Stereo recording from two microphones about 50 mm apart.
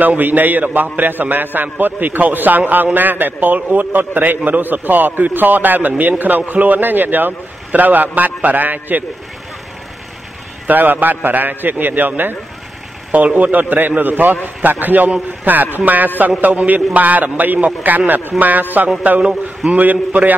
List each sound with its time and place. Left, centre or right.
0.0 s a man's voice: right
10.7 s a man's voice: right